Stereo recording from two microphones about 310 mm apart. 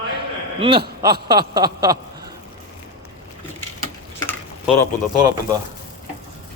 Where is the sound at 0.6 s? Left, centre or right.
Centre.